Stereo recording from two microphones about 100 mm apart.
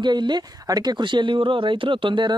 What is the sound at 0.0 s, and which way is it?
Speech, 50° right (ahead or behind).